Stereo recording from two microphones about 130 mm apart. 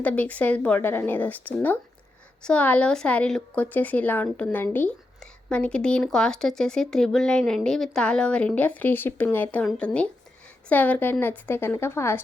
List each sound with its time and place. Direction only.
0.0 s speech: 10° left (ahead or behind)